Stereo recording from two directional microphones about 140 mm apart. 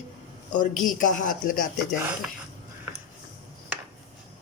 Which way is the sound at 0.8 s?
70° left (ahead or behind).